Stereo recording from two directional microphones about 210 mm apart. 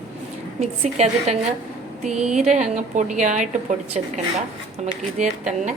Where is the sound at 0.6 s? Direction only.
30° right (ahead or behind).